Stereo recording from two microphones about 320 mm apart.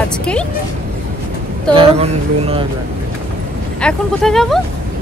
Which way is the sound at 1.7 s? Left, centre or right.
Centre.